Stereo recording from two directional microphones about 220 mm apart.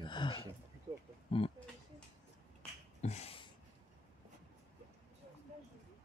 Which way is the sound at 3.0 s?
30° left (ahead or behind).